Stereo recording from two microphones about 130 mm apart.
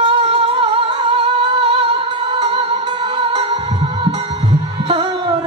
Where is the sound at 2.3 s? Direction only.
45° right (ahead or behind).